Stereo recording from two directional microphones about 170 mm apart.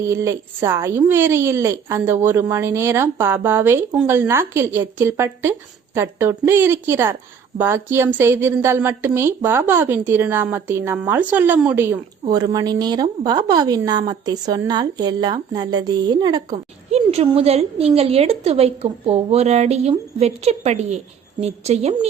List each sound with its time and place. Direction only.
0.1 s a woman's voice: 15° right (ahead or behind)
12.3 s a woman's voice: 20° right (ahead or behind)
16.9 s a woman's voice: 35° right (ahead or behind)